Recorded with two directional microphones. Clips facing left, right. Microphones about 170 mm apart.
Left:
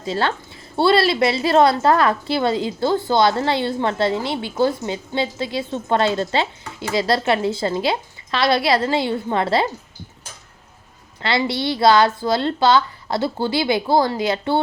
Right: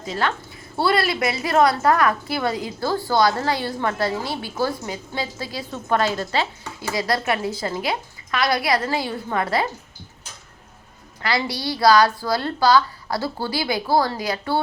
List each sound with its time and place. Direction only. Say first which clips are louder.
0.0 s a woman's voice: left 3 dB; 30° left (ahead or behind)
11.2 s a woman's voice: left 3 dB; 25° left (ahead or behind)